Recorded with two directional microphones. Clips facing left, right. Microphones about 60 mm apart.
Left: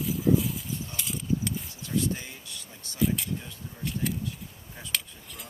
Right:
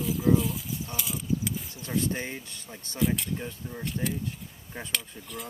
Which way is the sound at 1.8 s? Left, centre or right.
Right.